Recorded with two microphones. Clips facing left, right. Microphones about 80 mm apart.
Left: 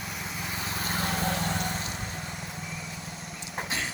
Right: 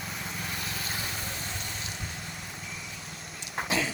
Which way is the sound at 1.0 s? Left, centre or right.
Left.